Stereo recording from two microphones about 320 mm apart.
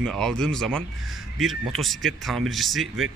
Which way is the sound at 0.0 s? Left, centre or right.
Centre.